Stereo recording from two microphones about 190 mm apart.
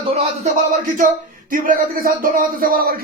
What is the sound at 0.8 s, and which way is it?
A man's voice, 45° right (ahead or behind).